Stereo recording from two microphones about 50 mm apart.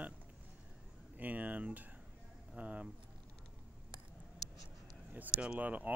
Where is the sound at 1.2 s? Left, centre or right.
Right.